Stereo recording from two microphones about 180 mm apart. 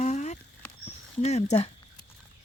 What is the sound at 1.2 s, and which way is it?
Speech, 40° left (ahead or behind).